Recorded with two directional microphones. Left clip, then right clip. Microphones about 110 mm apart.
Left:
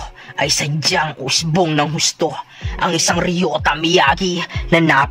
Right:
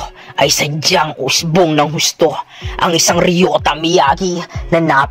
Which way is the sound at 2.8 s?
40° right (ahead or behind).